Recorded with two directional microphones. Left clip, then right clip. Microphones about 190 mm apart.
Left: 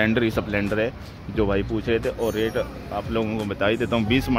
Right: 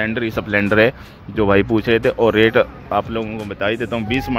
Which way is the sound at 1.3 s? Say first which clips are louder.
Right 8 dB; 15° right (ahead or behind).